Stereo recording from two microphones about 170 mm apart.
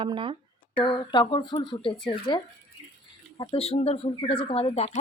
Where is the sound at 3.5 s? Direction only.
35° left (ahead or behind).